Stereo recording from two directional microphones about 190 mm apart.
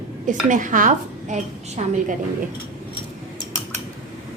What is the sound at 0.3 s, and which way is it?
A woman's voice, 40° right (ahead or behind).